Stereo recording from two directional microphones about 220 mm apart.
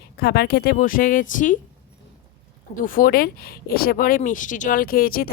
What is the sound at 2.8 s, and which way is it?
Speech, 40° left (ahead or behind).